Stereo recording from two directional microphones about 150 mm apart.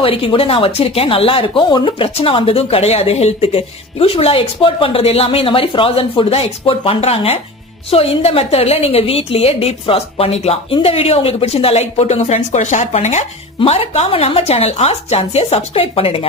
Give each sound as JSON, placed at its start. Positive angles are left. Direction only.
{"t": 0.0, "sound": "a woman's voice", "side_deg": 35}